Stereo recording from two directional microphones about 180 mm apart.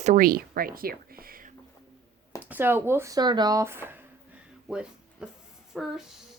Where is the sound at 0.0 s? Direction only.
45° right (ahead or behind).